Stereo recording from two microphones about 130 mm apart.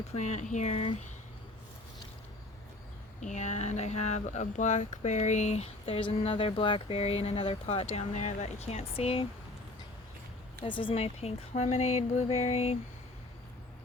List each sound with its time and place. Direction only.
0.2 s speech: 65° left (ahead or behind)
3.2 s speech: 65° left (ahead or behind)
10.6 s speech: 40° left (ahead or behind); by 12.7 s 55° left (ahead or behind)